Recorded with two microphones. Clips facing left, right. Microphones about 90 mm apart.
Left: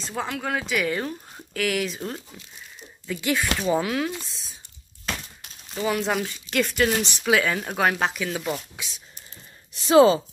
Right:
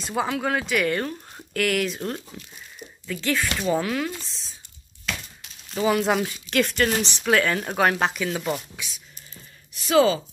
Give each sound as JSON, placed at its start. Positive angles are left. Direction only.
{"t": 0.0, "sound": "speech", "side_deg": -5}
{"t": 3.1, "sound": "speech", "side_deg": 15}
{"t": 5.8, "sound": "speech", "side_deg": -5}
{"t": 8.7, "sound": "a woman's voice", "side_deg": 25}